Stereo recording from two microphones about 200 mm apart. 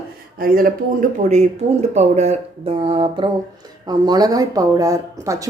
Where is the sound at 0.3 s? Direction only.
45° right (ahead or behind).